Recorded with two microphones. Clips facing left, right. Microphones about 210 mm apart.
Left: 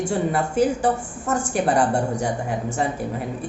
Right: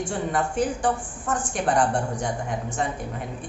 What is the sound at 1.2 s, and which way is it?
Speech, 10° left (ahead or behind).